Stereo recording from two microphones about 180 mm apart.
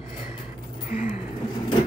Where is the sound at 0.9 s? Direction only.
45° left (ahead or behind).